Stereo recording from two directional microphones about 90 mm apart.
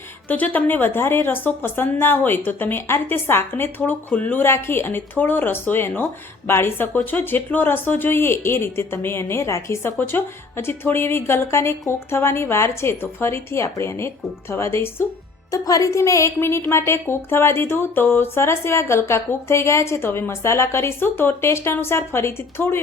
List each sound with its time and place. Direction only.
0.3 s speech: 20° left (ahead or behind)
15.5 s speech: 40° left (ahead or behind)